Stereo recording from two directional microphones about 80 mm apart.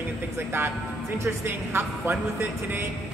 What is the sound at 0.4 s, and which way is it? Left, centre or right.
Speech, right.